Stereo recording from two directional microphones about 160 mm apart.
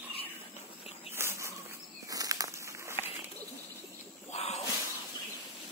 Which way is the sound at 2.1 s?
20° right (ahead or behind).